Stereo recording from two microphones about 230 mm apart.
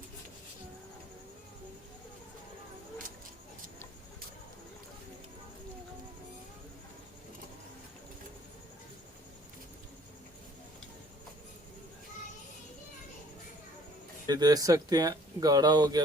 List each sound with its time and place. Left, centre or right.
14.3 s speech: centre